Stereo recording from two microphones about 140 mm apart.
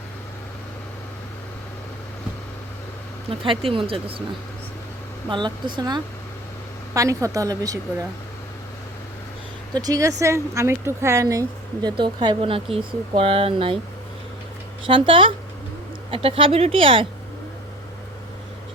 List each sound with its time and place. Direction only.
3.2 s speech: 40° right (ahead or behind)
5.3 s speech: 35° right (ahead or behind)
9.8 s speech: 25° right (ahead or behind); by 13.7 s 40° right (ahead or behind)
14.8 s speech: 40° right (ahead or behind)